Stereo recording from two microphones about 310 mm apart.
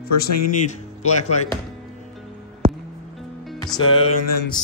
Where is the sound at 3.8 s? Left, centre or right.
Left.